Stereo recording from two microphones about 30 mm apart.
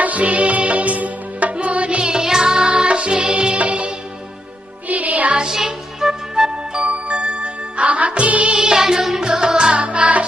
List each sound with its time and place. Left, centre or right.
0.0 s music: right
1.5 s music: right
2.0 s music: right
3.6 s music: right
4.9 s music: right
5.5 s music: centre
6.8 s music: right
8.5 s music: right